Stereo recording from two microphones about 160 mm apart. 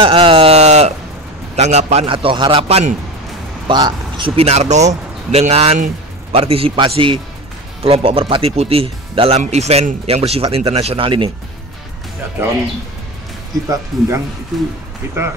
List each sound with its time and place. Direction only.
0.0 s a sound: 35° right (ahead or behind)
1.6 s a man's voice: 45° right (ahead or behind)
4.4 s a man's voice: 40° right (ahead or behind)
13.7 s speech: 20° right (ahead or behind)
14.5 s speech: centre (ahead or behind)